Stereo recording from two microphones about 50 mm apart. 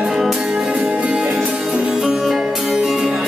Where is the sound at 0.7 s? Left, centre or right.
Right.